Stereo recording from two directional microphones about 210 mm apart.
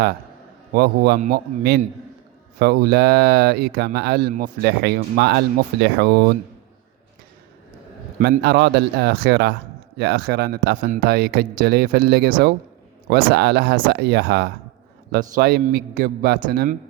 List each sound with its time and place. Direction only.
0.7 s speech: 50° right (ahead or behind)
8.2 s speech: 50° right (ahead or behind)